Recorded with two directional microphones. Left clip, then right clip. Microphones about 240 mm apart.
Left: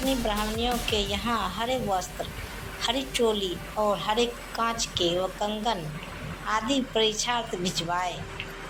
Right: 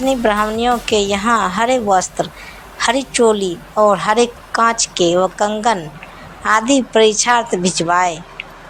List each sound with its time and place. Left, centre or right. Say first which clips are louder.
0.1 s a woman's voice: right 15 dB; right